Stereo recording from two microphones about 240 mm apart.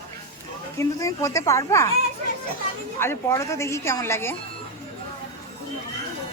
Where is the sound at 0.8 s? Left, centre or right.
Centre.